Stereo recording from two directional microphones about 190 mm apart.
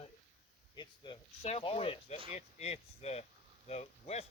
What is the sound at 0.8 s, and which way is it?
Speech, 25° left (ahead or behind).